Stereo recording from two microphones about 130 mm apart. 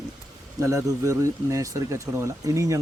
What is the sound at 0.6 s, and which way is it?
Speech, 25° right (ahead or behind).